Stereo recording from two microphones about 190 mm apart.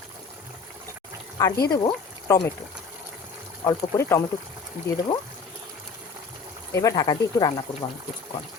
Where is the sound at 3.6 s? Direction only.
15° left (ahead or behind).